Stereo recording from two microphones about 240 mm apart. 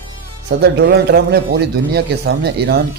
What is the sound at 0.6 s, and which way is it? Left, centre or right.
Speech, right.